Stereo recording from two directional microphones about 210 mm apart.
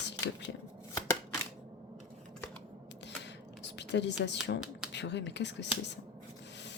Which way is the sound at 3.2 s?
55° left (ahead or behind).